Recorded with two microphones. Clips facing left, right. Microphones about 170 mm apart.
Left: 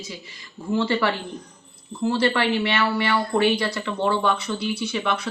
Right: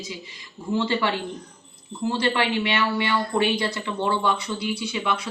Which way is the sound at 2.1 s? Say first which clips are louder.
Left 2 dB; 15° right (ahead or behind).